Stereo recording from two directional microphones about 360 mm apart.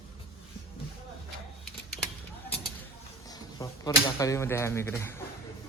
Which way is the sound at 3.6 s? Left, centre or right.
Centre.